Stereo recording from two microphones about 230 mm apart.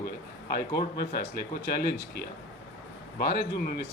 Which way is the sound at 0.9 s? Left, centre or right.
Left.